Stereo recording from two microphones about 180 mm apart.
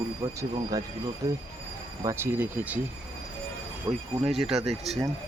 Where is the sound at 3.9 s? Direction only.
20° right (ahead or behind).